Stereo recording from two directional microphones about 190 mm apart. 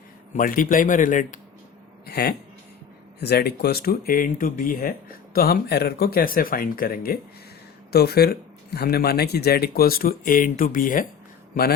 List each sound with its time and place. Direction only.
0.3 s speech: 45° left (ahead or behind)
2.0 s speech: 55° left (ahead or behind)